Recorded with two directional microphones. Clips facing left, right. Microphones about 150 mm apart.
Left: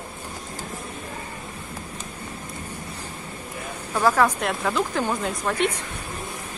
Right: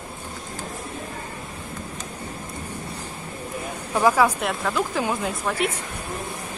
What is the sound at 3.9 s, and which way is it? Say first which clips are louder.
Speech: right 1 dB; 10° right (ahead or behind).